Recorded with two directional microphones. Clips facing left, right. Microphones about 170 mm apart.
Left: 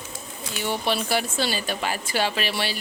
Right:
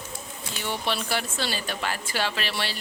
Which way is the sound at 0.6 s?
10° left (ahead or behind).